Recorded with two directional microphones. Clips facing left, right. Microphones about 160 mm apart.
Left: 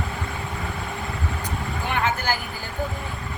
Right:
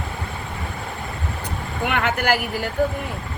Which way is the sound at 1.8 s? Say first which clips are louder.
Right 4 dB; 75° right (ahead or behind).